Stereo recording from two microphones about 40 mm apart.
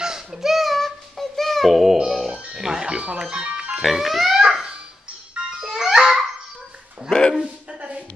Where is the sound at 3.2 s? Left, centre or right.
Right.